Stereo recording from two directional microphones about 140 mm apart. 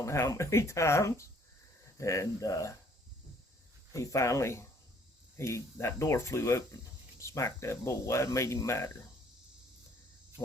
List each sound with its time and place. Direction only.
0.0 s speech: 20° left (ahead or behind)
3.9 s speech: 20° left (ahead or behind)